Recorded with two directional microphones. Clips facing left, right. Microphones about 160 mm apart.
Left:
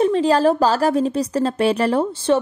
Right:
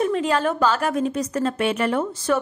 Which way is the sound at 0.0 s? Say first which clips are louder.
Left 5 dB; 30° left (ahead or behind).